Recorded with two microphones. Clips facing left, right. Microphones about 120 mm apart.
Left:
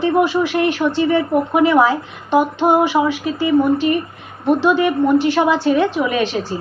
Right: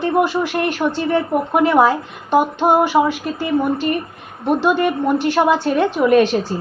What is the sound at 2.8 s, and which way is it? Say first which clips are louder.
A woman's voice: even; 50° right (ahead or behind).